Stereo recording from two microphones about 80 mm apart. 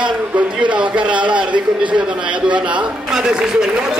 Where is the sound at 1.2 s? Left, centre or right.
Right.